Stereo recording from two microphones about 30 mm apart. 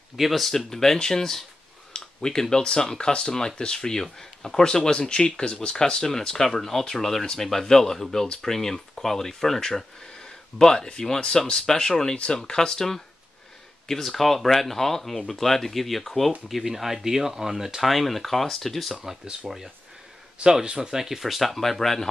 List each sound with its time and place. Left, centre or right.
0.2 s speech: centre
0.5 s speech: centre
2.0 s a sound: left
2.5 s speech: left
4.0 s speech: centre; by 5.7 s left
5.9 s speech: centre
17.8 s speech: centre
19.4 s speech: centre
20.4 s speech: right
20.7 s speech: right
21.2 s speech: centre